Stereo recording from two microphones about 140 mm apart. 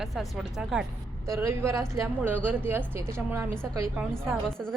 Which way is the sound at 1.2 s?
20° right (ahead or behind).